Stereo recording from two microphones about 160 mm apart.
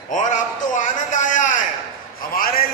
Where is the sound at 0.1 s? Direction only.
50° left (ahead or behind).